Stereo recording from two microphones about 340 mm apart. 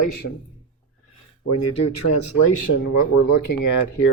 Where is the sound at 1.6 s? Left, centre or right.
Left.